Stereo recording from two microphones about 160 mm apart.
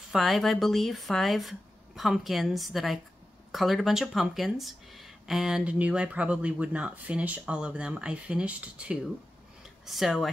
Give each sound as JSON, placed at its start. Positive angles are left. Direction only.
{"t": 0.1, "sound": "speech", "side_deg": 0}